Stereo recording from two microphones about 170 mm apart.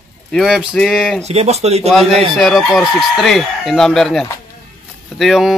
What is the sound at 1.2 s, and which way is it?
Speech, 40° right (ahead or behind).